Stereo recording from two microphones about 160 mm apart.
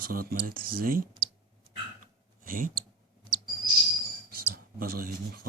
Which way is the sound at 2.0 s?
60° right (ahead or behind).